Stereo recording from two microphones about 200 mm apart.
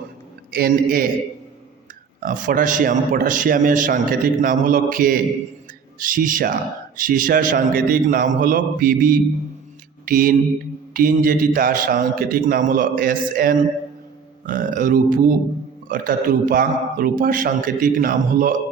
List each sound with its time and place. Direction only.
0.5 s a man's voice: 50° right (ahead or behind)
2.2 s a man's voice: 40° right (ahead or behind)